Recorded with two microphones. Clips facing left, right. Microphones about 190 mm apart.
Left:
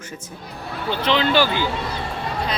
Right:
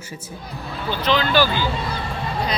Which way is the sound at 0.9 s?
25° left (ahead or behind).